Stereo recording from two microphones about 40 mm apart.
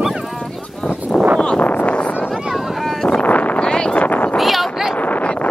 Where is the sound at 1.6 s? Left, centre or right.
Left.